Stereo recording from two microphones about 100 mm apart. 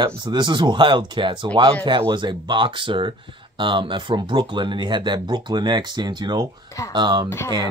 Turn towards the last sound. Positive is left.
turn(degrees=25)  # may be behind; listen again after turning